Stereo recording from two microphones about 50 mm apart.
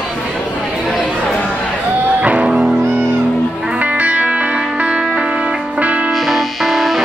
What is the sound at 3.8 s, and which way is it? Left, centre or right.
Music, right.